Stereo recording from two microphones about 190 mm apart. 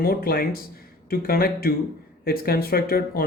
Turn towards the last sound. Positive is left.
turn(degrees=50)  # may be behind; listen again after turning